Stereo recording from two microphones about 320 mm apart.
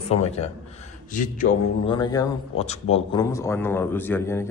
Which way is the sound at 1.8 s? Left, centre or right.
Centre.